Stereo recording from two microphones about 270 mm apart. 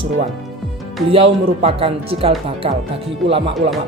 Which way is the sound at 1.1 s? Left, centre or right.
Right.